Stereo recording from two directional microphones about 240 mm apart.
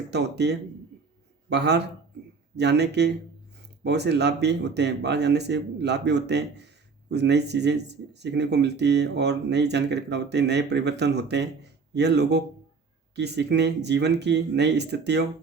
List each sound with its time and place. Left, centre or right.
0.1 s speech: right